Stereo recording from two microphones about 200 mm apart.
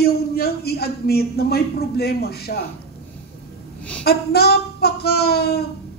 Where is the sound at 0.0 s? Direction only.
50° left (ahead or behind).